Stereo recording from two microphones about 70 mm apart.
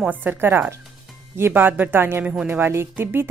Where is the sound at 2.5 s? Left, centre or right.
Right.